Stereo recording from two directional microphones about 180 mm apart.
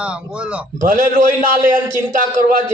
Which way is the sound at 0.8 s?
45° right (ahead or behind).